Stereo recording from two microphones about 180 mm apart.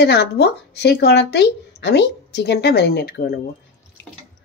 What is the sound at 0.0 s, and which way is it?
Speech, 65° left (ahead or behind).